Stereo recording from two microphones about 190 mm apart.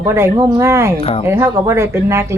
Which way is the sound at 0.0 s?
15° right (ahead or behind).